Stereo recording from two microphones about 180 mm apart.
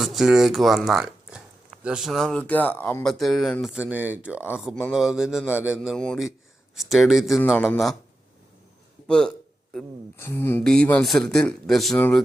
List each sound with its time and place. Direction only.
0.0 s speech: centre (ahead or behind)
9.0 s speech: 5° left (ahead or behind)